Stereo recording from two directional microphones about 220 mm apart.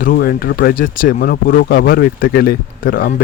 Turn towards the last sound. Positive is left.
turn(degrees=40)  # may be behind; listen again after turning